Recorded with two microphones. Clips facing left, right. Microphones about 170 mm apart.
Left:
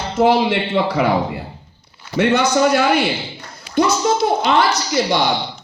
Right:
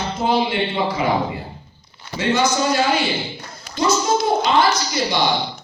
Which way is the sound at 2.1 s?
65° left (ahead or behind).